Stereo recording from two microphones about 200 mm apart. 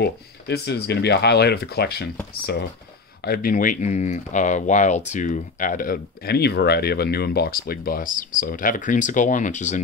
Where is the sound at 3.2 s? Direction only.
45° left (ahead or behind).